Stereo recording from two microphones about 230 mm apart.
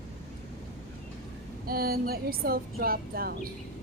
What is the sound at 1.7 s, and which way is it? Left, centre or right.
Speech, right.